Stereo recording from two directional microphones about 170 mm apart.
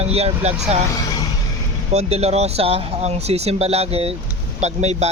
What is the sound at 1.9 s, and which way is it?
Speech, 40° right (ahead or behind).